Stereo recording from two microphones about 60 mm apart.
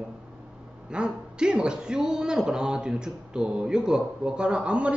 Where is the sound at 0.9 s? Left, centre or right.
Centre.